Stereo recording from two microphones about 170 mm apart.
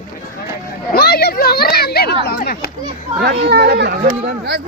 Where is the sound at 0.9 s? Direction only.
65° left (ahead or behind).